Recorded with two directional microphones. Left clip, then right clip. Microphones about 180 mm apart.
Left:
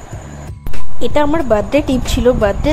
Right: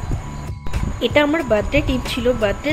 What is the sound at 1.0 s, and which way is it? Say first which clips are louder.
A woman's voice: left 2 dB; 30° left (ahead or behind).